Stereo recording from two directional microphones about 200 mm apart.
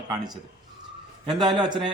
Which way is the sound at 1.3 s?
20° right (ahead or behind).